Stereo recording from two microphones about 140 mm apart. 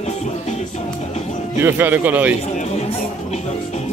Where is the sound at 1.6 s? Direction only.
15° right (ahead or behind).